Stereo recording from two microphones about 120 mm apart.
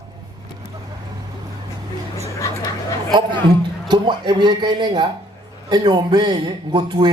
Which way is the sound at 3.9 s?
40° right (ahead or behind).